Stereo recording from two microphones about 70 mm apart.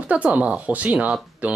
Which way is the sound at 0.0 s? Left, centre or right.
Centre.